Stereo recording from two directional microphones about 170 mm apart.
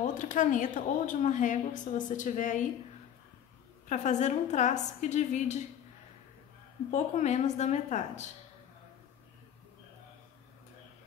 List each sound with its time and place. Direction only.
0.0 s a woman's voice: 50° left (ahead or behind)
3.9 s a woman's voice: 45° left (ahead or behind)
6.9 s a woman's voice: 45° left (ahead or behind)